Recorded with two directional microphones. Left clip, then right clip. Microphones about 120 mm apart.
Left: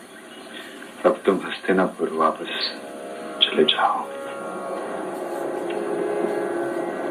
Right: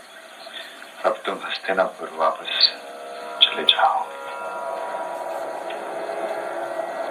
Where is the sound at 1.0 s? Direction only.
30° right (ahead or behind).